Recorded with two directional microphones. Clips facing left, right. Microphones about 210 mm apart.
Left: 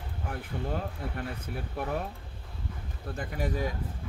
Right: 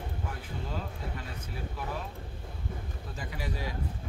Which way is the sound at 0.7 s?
55° left (ahead or behind).